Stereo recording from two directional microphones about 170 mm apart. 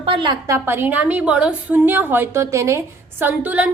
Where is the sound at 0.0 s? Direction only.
30° right (ahead or behind).